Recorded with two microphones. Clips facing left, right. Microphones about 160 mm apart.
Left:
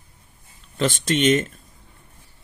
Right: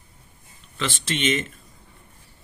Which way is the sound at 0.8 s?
45° left (ahead or behind).